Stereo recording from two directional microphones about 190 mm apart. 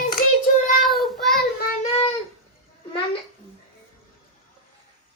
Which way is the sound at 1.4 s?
50° left (ahead or behind).